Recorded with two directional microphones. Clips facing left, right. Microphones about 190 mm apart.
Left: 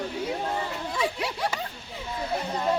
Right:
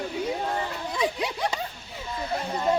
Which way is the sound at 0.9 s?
15° right (ahead or behind).